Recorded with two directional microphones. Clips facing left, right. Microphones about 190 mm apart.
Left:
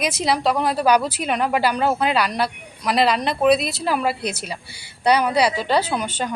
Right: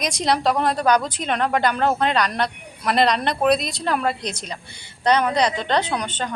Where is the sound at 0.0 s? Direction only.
5° left (ahead or behind).